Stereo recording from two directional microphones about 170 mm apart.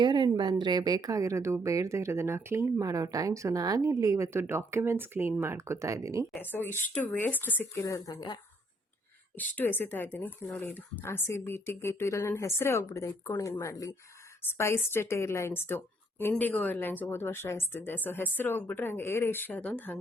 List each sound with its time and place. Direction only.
0.0 s a sound: 25° right (ahead or behind)
0.6 s speech: 25° right (ahead or behind)
6.3 s a woman's voice: 10° left (ahead or behind)
9.4 s a woman's voice: 10° left (ahead or behind)